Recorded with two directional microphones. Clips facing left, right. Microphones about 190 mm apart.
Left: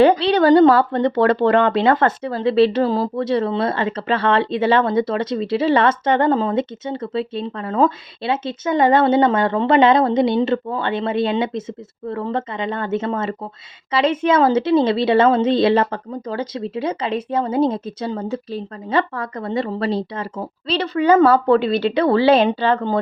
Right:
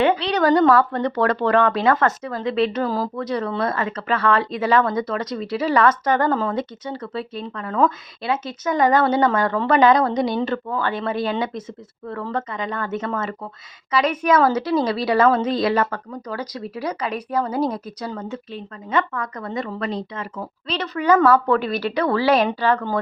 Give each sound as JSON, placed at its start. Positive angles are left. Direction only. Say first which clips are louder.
{"t": 0.0, "sound": "speech", "louder": "left 5 dB", "side_deg": 35}